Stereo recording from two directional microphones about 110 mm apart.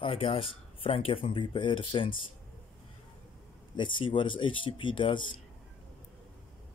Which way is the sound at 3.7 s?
50° left (ahead or behind).